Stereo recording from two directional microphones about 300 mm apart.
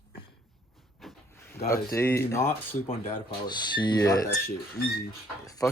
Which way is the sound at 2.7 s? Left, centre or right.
Left.